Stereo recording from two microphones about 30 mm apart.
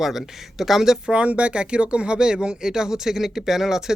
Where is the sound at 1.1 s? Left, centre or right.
Right.